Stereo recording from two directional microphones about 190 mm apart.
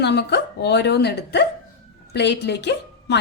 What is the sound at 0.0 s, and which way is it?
A woman's voice, 60° left (ahead or behind).